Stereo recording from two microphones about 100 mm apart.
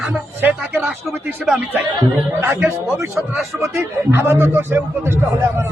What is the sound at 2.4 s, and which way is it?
Speech, 25° right (ahead or behind).